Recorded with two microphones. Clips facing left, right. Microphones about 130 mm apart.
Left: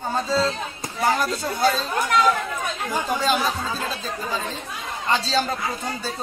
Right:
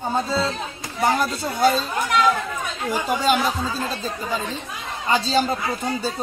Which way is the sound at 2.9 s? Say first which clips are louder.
Right 3 dB; 10° right (ahead or behind).